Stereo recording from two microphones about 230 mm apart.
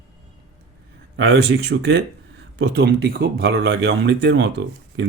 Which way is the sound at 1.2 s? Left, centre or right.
Right.